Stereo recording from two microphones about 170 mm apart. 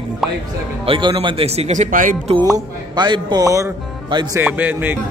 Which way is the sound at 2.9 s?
25° right (ahead or behind).